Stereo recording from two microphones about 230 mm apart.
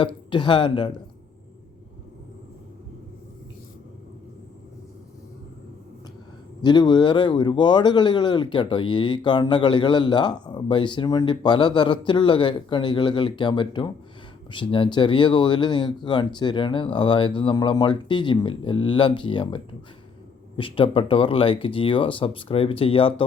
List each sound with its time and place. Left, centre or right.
0.0 s speech: left
6.6 s speech: centre